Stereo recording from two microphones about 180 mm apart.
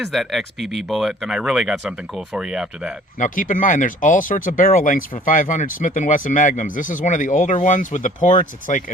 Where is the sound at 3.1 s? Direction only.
45° left (ahead or behind).